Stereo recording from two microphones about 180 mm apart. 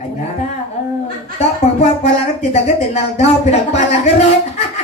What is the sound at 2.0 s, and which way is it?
Speech, 35° left (ahead or behind).